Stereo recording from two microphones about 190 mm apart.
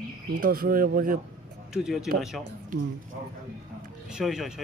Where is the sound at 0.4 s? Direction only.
50° right (ahead or behind).